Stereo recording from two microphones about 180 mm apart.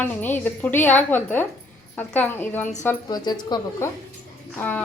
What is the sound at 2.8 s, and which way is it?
A woman's voice, 20° left (ahead or behind).